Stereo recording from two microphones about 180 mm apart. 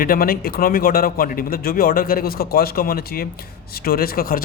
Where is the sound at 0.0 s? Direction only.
55° left (ahead or behind).